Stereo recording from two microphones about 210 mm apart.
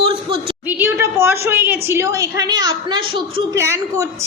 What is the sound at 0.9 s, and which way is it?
A woman's voice, 10° right (ahead or behind).